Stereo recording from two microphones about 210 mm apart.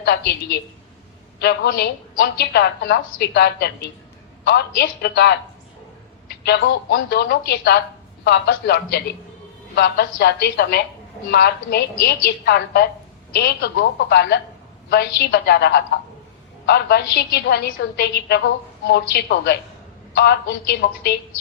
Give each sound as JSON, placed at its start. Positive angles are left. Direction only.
{"t": 0.0, "sound": "a woman's voice", "side_deg": 50}